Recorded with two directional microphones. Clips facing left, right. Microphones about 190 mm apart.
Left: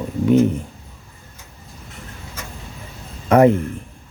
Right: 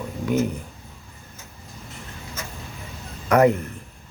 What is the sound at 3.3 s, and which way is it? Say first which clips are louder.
Speech: left 4 dB; 25° left (ahead or behind).